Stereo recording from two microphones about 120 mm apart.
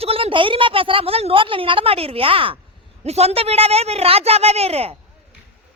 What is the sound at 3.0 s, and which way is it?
A woman's voice, 60° right (ahead or behind).